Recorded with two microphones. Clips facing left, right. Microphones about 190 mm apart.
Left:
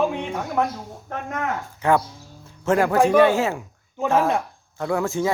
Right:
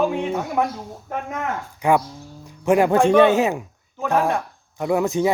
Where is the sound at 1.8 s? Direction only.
15° right (ahead or behind).